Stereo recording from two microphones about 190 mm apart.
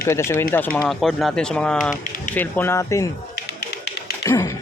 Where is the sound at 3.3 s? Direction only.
60° left (ahead or behind).